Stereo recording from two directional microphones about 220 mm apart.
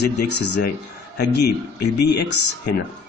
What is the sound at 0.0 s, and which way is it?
A man's voice, 50° left (ahead or behind).